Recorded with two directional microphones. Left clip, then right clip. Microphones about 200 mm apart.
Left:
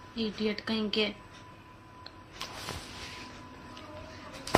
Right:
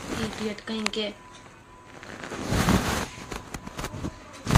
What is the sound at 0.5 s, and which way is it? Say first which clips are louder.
Speech: right 1 dB; 25° left (ahead or behind).